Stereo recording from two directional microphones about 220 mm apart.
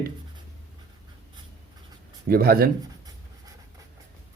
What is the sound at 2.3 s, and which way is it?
Speech, 45° right (ahead or behind).